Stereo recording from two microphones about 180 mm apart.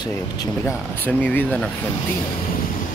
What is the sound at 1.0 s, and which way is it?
Speech, 10° left (ahead or behind).